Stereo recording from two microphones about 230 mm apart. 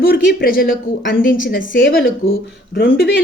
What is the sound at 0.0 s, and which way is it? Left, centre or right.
Speech, left.